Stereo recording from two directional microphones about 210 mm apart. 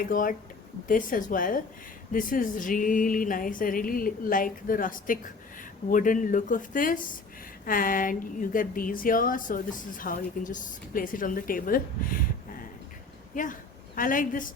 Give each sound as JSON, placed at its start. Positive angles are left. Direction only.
{"t": 0.0, "sound": "a woman's voice", "side_deg": 40}